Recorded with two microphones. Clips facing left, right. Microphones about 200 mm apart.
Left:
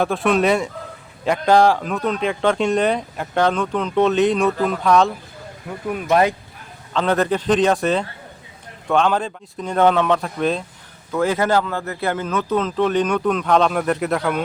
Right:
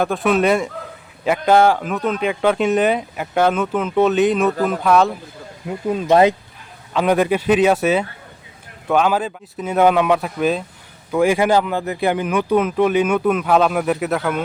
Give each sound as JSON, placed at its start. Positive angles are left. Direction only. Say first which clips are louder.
{"t": 0.0, "sound": "speech", "louder": "right 1 dB", "side_deg": 0}
{"t": 5.9, "sound": "speech", "louder": "right 4 dB", "side_deg": -25}
{"t": 6.9, "sound": "speech", "louder": "right 2 dB", "side_deg": -10}